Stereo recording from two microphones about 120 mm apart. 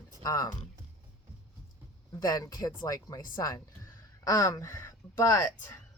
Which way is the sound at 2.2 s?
35° left (ahead or behind).